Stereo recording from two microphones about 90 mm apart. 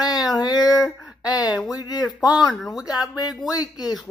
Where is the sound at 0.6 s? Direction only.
40° left (ahead or behind).